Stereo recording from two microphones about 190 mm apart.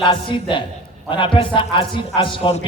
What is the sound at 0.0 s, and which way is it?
A man's voice, 25° left (ahead or behind).